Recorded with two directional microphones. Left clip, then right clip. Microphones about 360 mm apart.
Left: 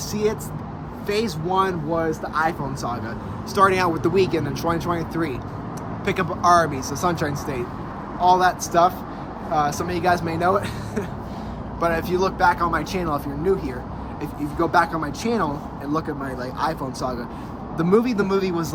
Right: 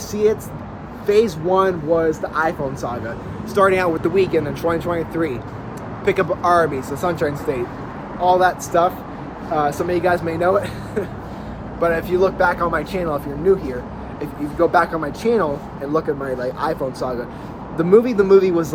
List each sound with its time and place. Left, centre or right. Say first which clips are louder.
0.1 s speech: right 6 dB; centre
9.9 s speech: right 3 dB; centre
14.2 s speech: right 6 dB; centre
15.9 s speech: right 6 dB; centre
17.7 s speech: right 6 dB; centre